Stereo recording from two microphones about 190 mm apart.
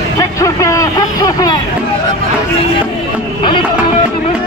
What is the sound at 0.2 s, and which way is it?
Vehicle, 15° left (ahead or behind).